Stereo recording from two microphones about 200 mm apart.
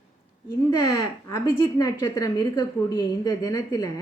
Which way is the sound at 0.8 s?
15° left (ahead or behind).